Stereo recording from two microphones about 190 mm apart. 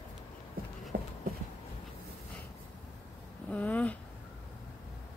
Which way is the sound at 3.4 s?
5° left (ahead or behind).